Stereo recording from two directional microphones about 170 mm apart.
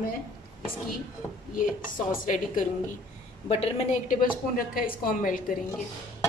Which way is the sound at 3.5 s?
40° left (ahead or behind).